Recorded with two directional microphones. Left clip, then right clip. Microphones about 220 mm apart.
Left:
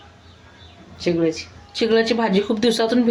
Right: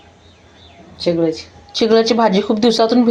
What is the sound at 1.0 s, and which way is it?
Speech, 5° left (ahead or behind).